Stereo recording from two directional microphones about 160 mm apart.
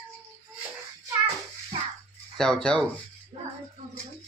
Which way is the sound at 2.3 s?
5° left (ahead or behind).